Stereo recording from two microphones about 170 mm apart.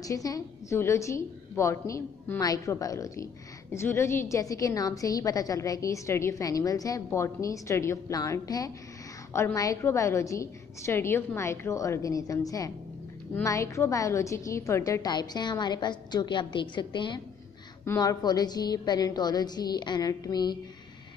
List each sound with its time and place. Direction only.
0.0 s a woman's voice: 20° left (ahead or behind)